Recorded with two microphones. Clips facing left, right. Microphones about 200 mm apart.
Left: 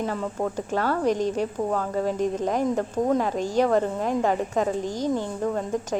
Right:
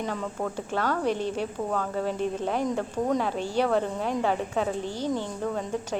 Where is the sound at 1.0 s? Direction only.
40° left (ahead or behind).